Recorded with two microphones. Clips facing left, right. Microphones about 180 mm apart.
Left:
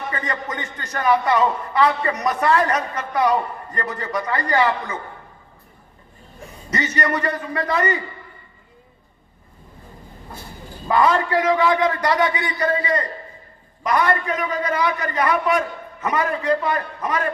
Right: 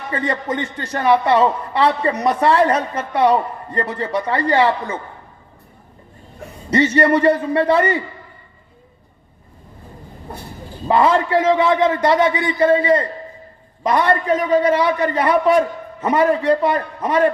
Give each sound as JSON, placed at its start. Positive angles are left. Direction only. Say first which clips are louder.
{"t": 0.1, "sound": "a man's voice", "louder": "right 10 dB", "side_deg": -30}
{"t": 6.7, "sound": "a man's voice", "louder": "right 8 dB", "side_deg": -30}
{"t": 10.8, "sound": "a man's voice", "louder": "right 3 dB", "side_deg": -25}